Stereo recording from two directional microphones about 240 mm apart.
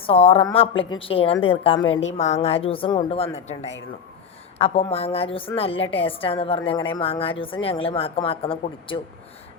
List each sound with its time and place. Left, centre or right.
0.0 s a woman's voice: left